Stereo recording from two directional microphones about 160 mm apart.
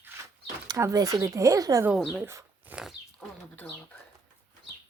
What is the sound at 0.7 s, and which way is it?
Speech, 20° right (ahead or behind).